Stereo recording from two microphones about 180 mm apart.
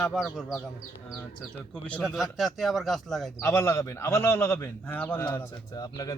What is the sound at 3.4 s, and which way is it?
A man's voice, 15° left (ahead or behind).